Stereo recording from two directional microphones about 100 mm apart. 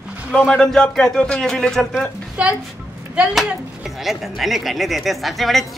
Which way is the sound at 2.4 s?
15° right (ahead or behind).